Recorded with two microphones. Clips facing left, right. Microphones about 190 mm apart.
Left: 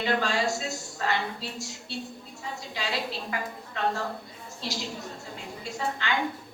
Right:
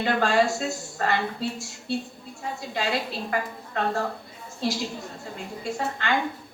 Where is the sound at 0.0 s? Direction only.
55° right (ahead or behind).